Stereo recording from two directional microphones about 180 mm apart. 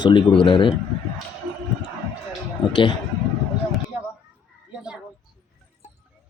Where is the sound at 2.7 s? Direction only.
25° left (ahead or behind).